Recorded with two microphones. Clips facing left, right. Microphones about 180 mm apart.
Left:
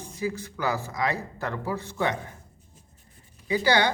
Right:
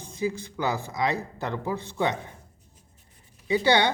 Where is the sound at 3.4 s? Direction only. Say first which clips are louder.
Right 1 dB; 25° right (ahead or behind).